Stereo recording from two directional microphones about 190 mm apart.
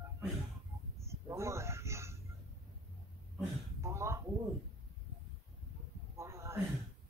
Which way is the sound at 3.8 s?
15° right (ahead or behind).